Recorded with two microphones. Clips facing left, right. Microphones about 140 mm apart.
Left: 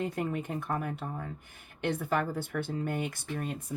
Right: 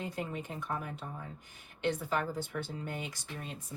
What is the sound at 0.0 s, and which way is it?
Speech, 55° left (ahead or behind).